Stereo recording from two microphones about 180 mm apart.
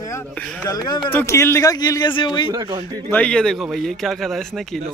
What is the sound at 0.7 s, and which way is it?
Speech, 25° left (ahead or behind).